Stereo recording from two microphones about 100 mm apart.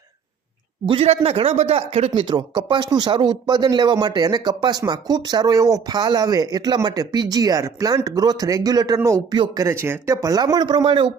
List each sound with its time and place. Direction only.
0.9 s speech: 80° right
2.2 s speech: 45° right (ahead or behind)
9.6 s speech: 25° right (ahead or behind); by 11.1 s 55° right (ahead or behind)